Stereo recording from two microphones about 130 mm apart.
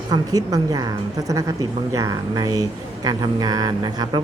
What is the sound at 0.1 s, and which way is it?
A woman's voice, 25° right (ahead or behind).